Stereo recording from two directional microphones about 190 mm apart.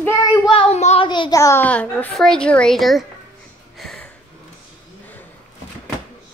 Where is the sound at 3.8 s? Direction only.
Centre (ahead or behind).